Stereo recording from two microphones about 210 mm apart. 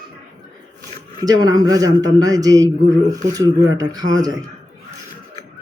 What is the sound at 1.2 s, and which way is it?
A man's voice, 15° right (ahead or behind).